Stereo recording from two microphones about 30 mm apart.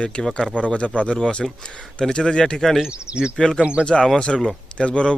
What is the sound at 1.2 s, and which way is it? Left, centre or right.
Speech, left.